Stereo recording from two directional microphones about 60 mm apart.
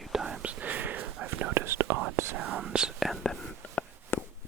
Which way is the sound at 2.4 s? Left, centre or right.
Right.